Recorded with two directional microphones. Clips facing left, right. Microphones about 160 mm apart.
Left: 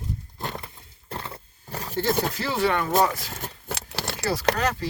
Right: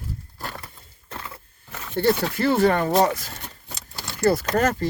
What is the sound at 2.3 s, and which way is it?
Speech, 55° right (ahead or behind).